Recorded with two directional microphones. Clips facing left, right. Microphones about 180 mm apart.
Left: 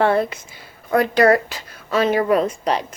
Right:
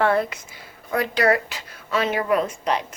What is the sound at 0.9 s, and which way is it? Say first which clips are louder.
A woman's voice: left 5 dB; 50° left (ahead or behind).